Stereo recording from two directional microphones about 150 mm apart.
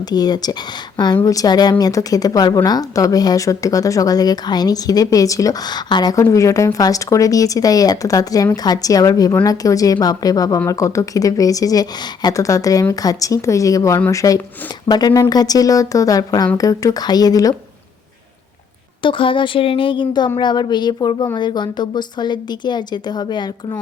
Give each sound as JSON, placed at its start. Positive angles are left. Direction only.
{"t": 0.1, "sound": "a woman's voice", "side_deg": 25}
{"t": 19.0, "sound": "a woman's voice", "side_deg": 35}